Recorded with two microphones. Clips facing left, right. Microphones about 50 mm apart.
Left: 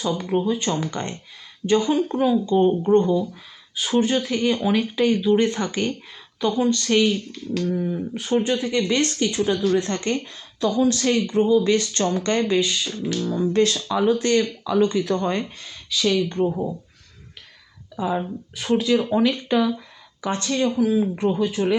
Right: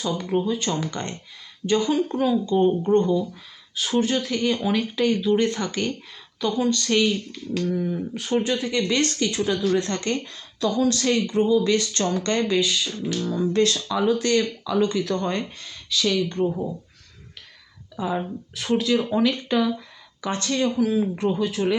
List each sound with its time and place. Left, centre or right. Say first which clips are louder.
0.0 s speech: left 2 dB; centre
7.3 s finger snapping: left 1 dB; centre
7.7 s speech: left 1 dB; centre
18.0 s speech: left 2 dB; centre